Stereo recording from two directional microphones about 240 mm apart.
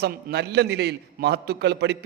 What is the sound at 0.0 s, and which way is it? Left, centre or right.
A man's voice, right.